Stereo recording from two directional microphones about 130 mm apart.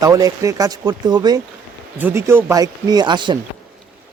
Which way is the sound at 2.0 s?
20° right (ahead or behind).